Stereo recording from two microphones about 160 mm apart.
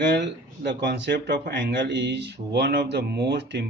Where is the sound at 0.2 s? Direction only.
90° right.